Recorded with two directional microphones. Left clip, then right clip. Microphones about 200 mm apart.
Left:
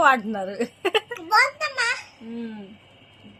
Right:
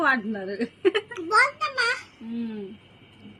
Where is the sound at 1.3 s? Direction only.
30° left (ahead or behind).